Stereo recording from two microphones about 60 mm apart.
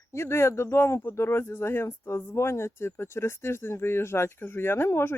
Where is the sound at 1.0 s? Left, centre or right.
Left.